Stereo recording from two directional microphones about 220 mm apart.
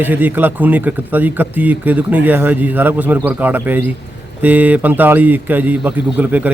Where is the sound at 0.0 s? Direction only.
10° right (ahead or behind).